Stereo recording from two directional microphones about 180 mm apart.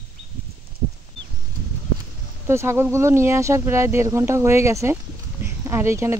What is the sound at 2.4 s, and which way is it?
Speech, 15° right (ahead or behind).